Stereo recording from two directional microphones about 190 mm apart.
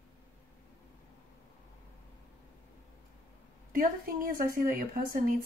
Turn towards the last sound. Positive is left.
turn(degrees=-50)  # may be behind; listen again after turning